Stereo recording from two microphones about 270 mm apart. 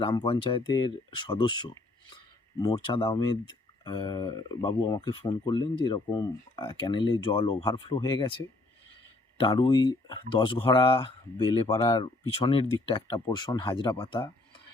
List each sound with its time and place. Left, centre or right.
0.0 s speech: centre
9.4 s speech: centre